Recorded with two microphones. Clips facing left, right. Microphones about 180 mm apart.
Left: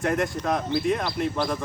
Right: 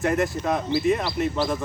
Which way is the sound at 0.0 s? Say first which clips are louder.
Right 2 dB; centre (ahead or behind).